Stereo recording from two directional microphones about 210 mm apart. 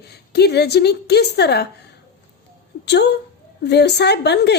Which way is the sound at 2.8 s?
50° left (ahead or behind).